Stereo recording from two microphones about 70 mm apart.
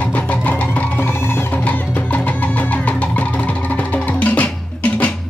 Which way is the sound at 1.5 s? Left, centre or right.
Left.